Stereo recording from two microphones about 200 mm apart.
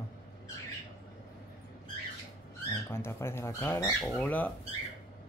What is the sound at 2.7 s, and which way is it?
Speech, 10° left (ahead or behind).